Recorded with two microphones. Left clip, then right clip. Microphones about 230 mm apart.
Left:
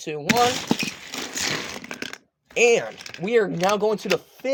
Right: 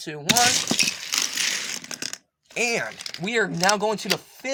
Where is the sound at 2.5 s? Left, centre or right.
Right.